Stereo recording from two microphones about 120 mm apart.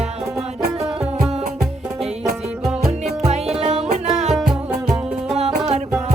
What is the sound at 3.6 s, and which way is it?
Music, 65° right (ahead or behind).